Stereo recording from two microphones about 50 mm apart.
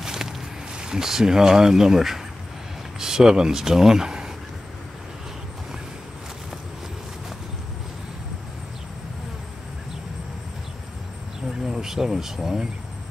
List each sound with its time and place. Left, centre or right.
0.0 s a sound: centre
0.7 s speech: centre
11.6 s speech: centre